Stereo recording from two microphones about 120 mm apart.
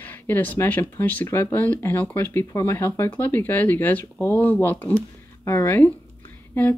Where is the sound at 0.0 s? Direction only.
15° left (ahead or behind).